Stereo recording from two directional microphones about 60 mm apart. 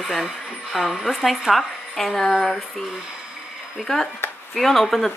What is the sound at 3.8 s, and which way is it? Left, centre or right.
Speech, centre.